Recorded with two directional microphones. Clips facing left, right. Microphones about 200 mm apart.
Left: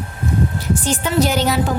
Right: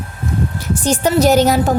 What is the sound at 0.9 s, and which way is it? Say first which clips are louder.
Speech: right 6 dB; 45° right (ahead or behind).